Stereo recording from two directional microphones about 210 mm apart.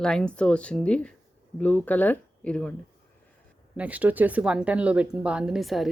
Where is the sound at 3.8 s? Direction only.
5° right (ahead or behind).